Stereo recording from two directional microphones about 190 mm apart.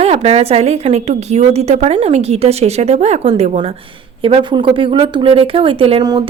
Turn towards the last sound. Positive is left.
turn(degrees=-25)  # may be behind; listen again after turning